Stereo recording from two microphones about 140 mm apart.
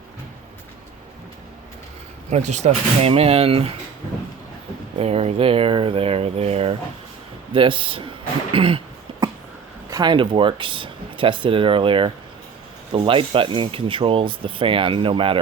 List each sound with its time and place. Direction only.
2.3 s speech: 55° right (ahead or behind)
4.9 s speech: 50° right (ahead or behind)
9.9 s speech: 30° right (ahead or behind)